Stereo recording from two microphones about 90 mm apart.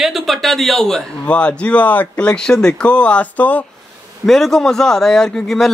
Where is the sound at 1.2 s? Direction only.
15° left (ahead or behind).